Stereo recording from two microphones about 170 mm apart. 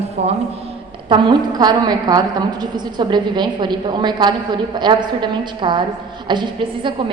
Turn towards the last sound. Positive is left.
turn(degrees=-30)  # may be behind; listen again after turning